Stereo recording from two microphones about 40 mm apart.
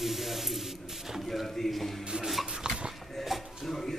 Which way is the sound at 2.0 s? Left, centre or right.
Centre.